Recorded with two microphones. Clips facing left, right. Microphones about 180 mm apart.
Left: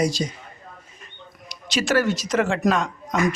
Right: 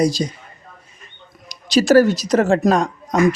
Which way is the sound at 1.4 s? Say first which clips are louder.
Right 9 dB; 40° right (ahead or behind).